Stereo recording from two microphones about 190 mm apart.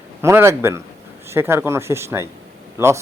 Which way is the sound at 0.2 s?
15° right (ahead or behind).